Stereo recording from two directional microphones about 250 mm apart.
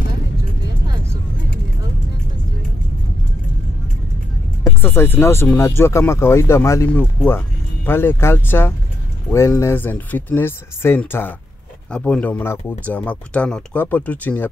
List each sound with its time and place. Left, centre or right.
4.6 s speech: centre